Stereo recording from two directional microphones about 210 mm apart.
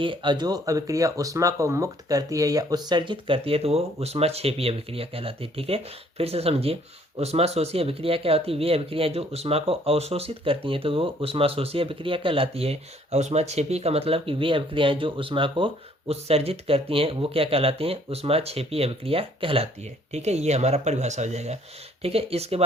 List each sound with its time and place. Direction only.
0.0 s speech: 25° right (ahead or behind)